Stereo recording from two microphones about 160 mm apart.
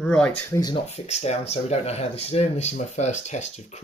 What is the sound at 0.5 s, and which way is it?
Speech, 25° left (ahead or behind).